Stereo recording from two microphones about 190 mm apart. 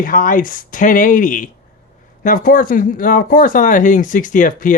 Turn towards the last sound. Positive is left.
turn(degrees=45)  # may be behind; listen again after turning